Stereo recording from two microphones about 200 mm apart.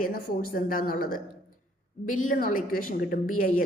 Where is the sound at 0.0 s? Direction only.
45° left (ahead or behind).